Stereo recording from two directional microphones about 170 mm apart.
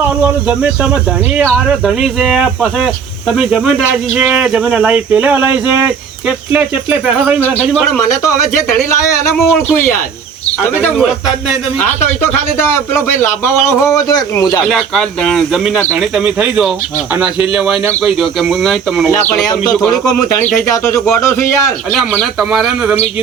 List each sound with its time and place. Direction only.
0.0 s speech: 10° right (ahead or behind)
7.3 s a man's voice: 10° left (ahead or behind)
9.3 s speech: centre (ahead or behind)
10.9 s speech: 5° right (ahead or behind)
12.3 s a man's voice: 15° left (ahead or behind)
14.7 s speech: centre (ahead or behind)
19.9 s a man's voice: 20° left (ahead or behind)
22.2 s speech: centre (ahead or behind)